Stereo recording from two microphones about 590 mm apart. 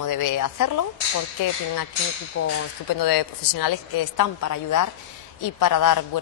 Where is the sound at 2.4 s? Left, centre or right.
Left.